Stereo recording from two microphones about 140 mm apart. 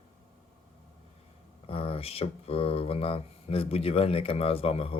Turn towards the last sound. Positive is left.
turn(degrees=45)  # may be behind; listen again after turning